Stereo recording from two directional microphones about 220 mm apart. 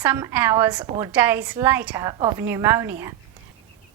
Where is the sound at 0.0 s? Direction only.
10° right (ahead or behind).